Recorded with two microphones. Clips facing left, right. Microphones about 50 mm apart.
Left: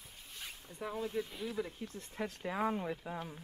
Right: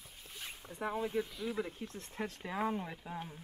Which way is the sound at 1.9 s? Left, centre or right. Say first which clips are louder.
Even; centre.